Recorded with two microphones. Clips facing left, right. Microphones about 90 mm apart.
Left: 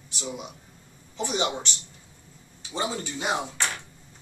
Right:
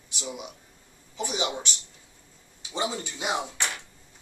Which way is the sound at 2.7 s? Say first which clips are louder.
Left 1 dB; 15° right (ahead or behind).